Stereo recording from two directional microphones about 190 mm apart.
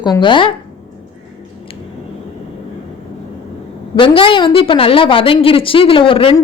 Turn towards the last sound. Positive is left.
turn(degrees=25)  # may be behind; listen again after turning